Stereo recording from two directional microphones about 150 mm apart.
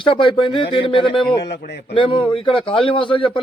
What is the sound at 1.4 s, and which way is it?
Speech, 90° left.